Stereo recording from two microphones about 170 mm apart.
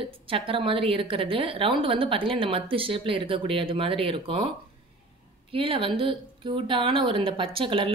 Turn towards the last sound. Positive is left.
turn(degrees=-30)  # may be behind; listen again after turning